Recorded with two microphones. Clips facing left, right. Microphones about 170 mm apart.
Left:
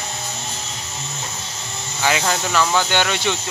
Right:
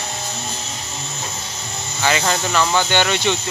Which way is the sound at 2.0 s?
5° left (ahead or behind).